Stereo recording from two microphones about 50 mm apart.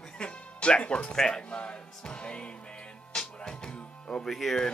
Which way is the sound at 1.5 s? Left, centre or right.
Left.